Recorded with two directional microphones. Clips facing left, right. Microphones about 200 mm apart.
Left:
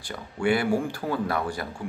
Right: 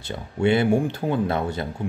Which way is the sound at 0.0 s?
25° right (ahead or behind).